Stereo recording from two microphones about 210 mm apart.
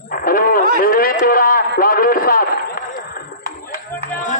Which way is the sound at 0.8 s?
45° left (ahead or behind).